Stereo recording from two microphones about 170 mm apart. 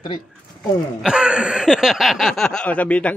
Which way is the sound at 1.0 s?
5° right (ahead or behind).